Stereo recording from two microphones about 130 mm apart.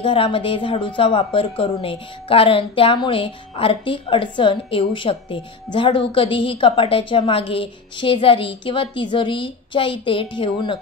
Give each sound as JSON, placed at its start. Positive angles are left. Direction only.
{"t": 0.0, "sound": "a woman's voice", "side_deg": 45}